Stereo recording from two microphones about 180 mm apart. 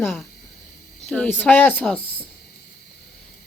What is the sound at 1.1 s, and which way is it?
Speech, 10° left (ahead or behind).